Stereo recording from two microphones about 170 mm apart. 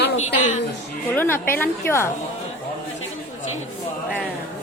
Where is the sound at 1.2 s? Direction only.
10° left (ahead or behind).